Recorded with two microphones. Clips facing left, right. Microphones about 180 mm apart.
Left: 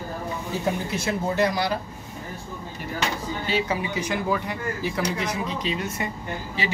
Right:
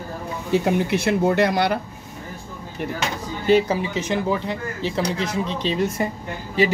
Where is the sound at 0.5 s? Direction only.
65° right (ahead or behind).